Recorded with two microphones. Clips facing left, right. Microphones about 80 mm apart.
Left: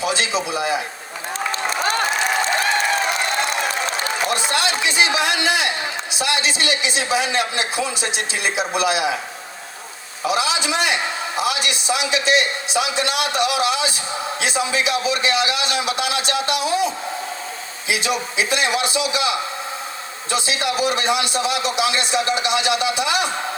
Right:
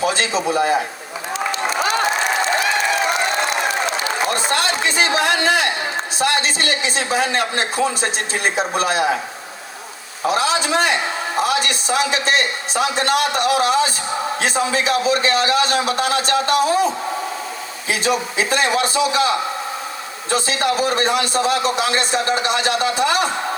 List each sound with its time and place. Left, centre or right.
0.0 s a man's voice: right
1.8 s applause: left
4.3 s a man's voice: right
10.2 s a man's voice: right